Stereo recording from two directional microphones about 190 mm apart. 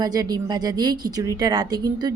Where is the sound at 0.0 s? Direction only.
20° right (ahead or behind).